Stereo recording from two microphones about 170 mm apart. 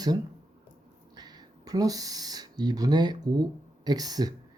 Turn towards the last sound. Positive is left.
turn(degrees=-25)  # may be behind; listen again after turning